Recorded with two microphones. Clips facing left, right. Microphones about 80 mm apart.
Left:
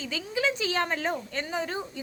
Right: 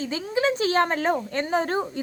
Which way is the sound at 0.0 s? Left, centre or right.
Right.